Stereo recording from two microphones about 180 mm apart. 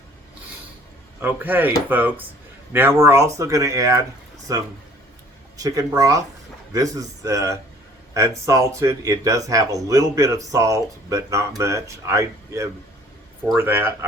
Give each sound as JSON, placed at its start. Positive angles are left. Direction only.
{"t": 1.2, "sound": "a man's voice", "side_deg": -10}